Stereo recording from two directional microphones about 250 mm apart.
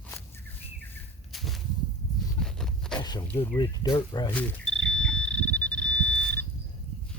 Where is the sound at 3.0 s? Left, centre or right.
Centre.